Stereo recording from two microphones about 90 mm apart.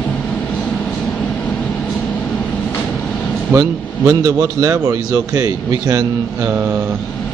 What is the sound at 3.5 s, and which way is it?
A man's voice, 35° right (ahead or behind).